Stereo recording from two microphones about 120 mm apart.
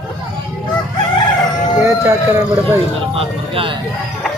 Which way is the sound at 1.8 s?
25° right (ahead or behind).